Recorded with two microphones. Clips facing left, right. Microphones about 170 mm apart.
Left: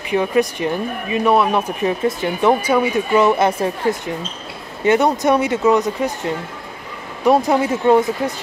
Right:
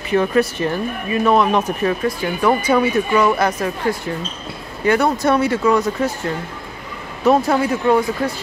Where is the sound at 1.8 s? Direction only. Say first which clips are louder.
Left 1 dB; 25° left (ahead or behind).